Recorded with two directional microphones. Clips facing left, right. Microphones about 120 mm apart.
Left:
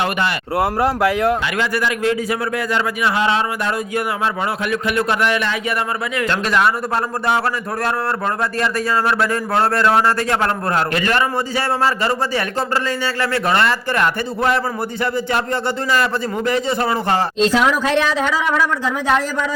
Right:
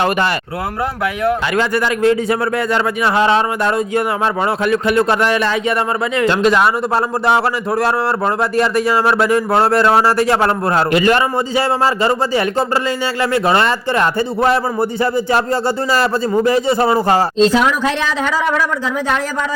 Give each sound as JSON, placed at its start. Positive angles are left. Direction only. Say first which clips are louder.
{"t": 1.5, "sound": "a man's voice", "louder": "right 4 dB", "side_deg": -35}